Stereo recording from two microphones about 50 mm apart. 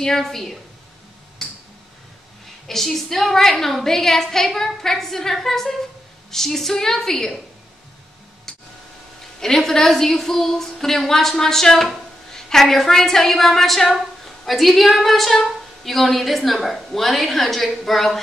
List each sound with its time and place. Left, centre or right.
0.0 s a woman's voice: centre
1.4 s tick-tock: centre
2.7 s a woman's voice: centre
9.4 s a woman's voice: centre